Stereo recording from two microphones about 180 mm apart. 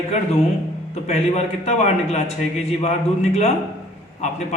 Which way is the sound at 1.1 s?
35° left (ahead or behind).